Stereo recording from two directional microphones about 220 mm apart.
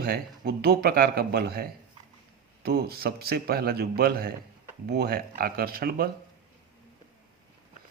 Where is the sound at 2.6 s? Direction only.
45° right (ahead or behind).